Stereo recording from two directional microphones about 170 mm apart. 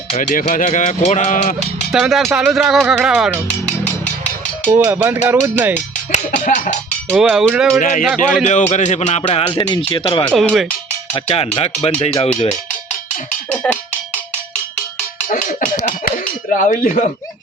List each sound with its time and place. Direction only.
0.2 s speech: 50° left (ahead or behind)
1.9 s speech: centre (ahead or behind)
4.7 s speech: 15° right (ahead or behind)
6.1 s speech: 45° left (ahead or behind)
7.1 s speech: 5° right (ahead or behind)
7.8 s speech: 50° left (ahead or behind)
8.1 s speech: centre (ahead or behind)
8.4 s speech: 45° left (ahead or behind)
9.5 s speech: 25° left (ahead or behind)
10.3 s speech: centre (ahead or behind)
11.1 s speech: 35° left (ahead or behind)
13.5 s cowbell: 10° left (ahead or behind)
15.3 s speech: 50° left (ahead or behind)